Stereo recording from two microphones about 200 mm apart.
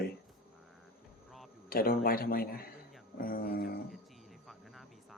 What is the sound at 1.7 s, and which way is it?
A man's voice, 50° left (ahead or behind).